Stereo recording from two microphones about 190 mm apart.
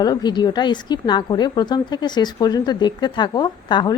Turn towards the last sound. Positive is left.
turn(degrees=25)  # may be behind; listen again after turning